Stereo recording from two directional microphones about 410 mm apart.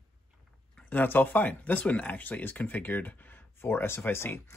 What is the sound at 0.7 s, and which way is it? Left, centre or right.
Speech, centre.